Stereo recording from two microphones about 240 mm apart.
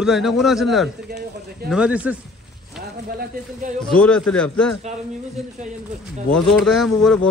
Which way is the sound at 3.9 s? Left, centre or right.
Centre.